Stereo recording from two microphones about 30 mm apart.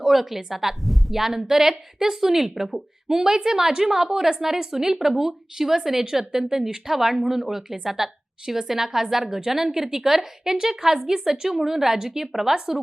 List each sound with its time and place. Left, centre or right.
0.0 s a woman's voice: centre